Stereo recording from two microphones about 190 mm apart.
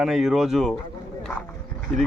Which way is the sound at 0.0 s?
Centre (ahead or behind).